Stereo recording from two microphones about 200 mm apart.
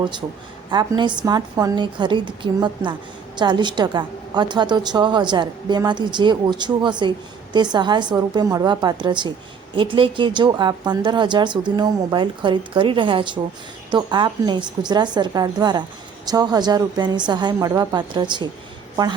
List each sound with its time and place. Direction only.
0.7 s speech: 20° right (ahead or behind)